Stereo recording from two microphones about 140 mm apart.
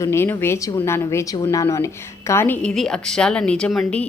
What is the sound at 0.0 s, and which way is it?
A woman's voice, 20° left (ahead or behind).